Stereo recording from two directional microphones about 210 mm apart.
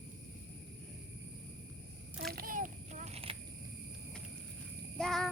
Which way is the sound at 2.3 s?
45° right (ahead or behind).